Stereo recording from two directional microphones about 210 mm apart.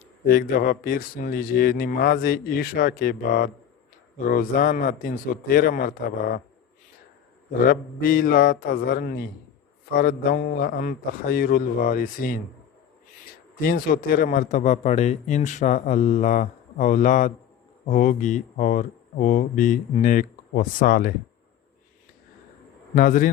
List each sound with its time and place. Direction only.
0.3 s a man's voice: 45° left (ahead or behind)
7.7 s a man's voice: 40° left (ahead or behind)
13.6 s a man's voice: 45° left (ahead or behind)
23.0 s a man's voice: 40° left (ahead or behind)